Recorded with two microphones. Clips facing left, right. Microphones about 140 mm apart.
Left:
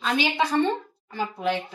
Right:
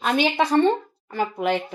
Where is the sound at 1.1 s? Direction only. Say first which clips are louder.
Right 5 dB; 60° right (ahead or behind).